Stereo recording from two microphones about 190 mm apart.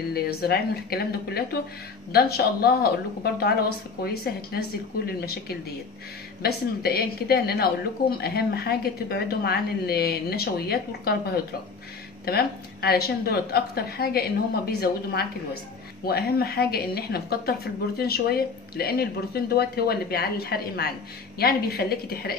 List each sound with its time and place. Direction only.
0.1 s a woman's voice: 55° left (ahead or behind)